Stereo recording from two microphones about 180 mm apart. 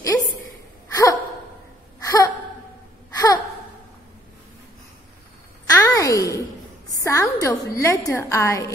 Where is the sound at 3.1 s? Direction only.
20° left (ahead or behind).